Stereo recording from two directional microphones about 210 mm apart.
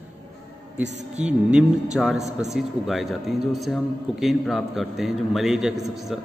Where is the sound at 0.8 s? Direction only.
35° right (ahead or behind).